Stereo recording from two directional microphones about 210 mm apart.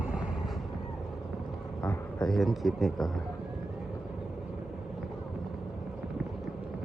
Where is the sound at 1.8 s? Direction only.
5° left (ahead or behind).